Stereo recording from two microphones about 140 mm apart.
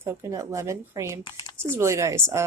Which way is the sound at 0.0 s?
20° right (ahead or behind).